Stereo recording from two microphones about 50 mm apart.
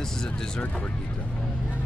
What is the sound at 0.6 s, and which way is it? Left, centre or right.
Speech, left.